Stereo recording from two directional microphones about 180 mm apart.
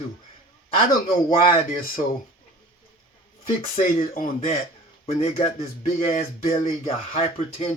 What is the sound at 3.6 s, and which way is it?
Speech, 50° left (ahead or behind).